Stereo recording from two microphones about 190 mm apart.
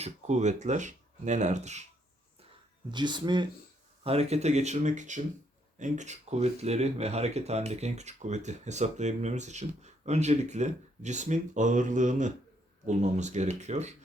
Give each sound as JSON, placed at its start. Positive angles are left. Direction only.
{"t": 0.0, "sound": "speech", "side_deg": -35}
{"t": 2.9, "sound": "speech", "side_deg": -25}